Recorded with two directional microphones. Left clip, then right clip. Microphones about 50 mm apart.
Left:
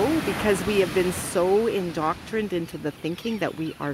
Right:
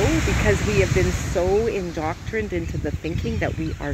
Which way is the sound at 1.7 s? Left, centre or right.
Left.